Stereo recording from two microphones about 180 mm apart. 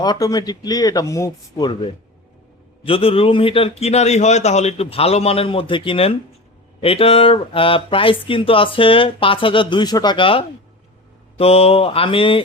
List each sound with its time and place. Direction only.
0.0 s a man's voice: 20° left (ahead or behind)